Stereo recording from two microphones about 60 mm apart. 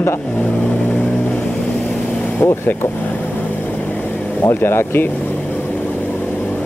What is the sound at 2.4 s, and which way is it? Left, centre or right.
Speech, left.